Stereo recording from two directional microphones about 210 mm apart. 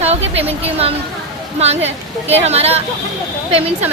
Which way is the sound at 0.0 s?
30° right (ahead or behind).